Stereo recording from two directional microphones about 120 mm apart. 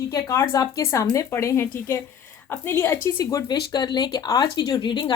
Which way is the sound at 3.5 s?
35° left (ahead or behind).